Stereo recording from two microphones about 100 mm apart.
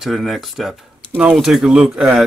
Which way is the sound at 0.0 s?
Centre (ahead or behind).